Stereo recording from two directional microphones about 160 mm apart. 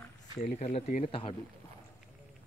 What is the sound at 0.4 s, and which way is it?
Speech, 40° left (ahead or behind).